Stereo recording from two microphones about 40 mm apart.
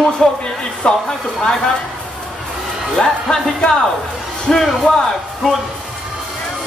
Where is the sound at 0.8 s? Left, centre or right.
Left.